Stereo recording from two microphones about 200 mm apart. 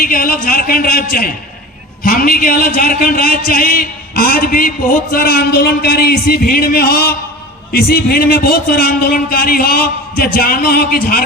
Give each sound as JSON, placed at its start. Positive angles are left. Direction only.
{"t": 0.0, "sound": "speech", "side_deg": 45}